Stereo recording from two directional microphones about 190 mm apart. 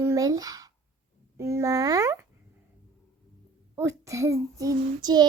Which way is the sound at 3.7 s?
15° right (ahead or behind).